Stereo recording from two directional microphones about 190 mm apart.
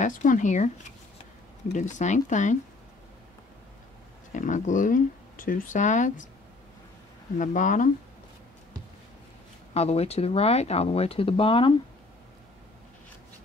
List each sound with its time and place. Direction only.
0.0 s speech: 40° left (ahead or behind)
4.3 s speech: 40° left (ahead or behind)
7.3 s speech: 40° left (ahead or behind)
9.8 s speech: 35° left (ahead or behind)